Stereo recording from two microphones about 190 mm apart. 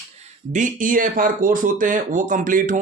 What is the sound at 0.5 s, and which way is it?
Speech, 45° right (ahead or behind).